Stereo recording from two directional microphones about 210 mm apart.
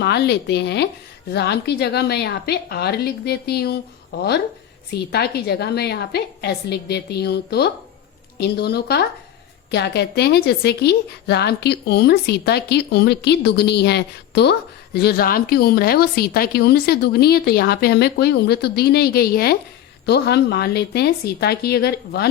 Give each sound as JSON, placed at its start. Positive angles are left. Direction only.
{"t": 0.0, "sound": "a woman's voice", "side_deg": 55}
{"t": 4.9, "sound": "a woman's voice", "side_deg": 50}